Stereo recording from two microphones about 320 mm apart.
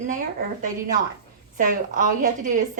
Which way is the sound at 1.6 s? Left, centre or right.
Right.